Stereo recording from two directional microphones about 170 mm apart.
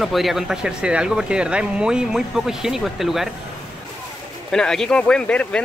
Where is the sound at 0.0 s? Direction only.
Centre (ahead or behind).